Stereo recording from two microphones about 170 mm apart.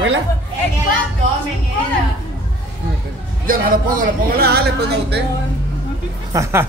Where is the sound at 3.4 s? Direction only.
55° right (ahead or behind).